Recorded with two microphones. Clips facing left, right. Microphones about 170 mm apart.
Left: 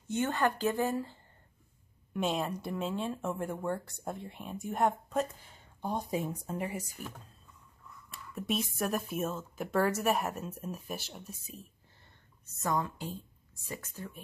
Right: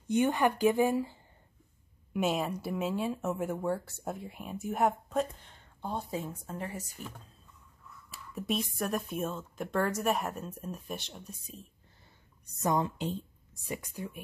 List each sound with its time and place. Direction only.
0.1 s speech: 15° right (ahead or behind); by 11.6 s 5° left (ahead or behind)
12.5 s a woman's voice: 20° right (ahead or behind)